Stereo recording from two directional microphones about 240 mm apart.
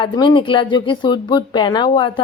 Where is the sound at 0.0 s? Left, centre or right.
Centre.